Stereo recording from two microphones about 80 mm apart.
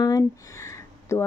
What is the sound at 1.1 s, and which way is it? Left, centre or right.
Speech, left.